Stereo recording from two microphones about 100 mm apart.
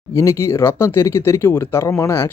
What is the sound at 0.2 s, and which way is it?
Speech, 30° left (ahead or behind).